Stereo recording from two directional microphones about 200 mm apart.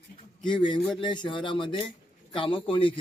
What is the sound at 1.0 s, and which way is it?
A man's voice, 25° left (ahead or behind).